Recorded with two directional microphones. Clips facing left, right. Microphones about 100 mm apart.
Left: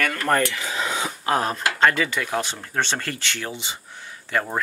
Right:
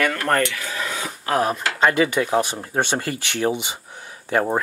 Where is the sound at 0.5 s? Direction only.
20° left (ahead or behind).